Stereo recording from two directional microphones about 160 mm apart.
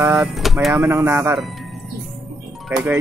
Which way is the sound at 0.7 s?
10° right (ahead or behind).